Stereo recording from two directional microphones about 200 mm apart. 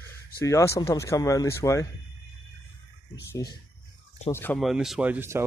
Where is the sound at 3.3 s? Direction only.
20° left (ahead or behind).